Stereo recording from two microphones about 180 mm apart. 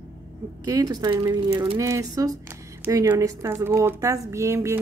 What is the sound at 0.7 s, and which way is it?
A woman's voice, 20° right (ahead or behind).